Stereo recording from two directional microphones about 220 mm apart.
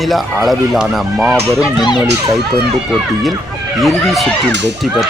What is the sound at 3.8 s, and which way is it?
Speech, centre (ahead or behind).